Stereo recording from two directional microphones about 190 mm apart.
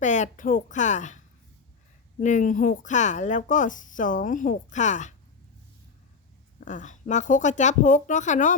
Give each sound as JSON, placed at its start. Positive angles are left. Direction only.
{"t": 0.0, "sound": "speech", "side_deg": 40}
{"t": 2.2, "sound": "speech", "side_deg": 40}
{"t": 6.7, "sound": "speech", "side_deg": 40}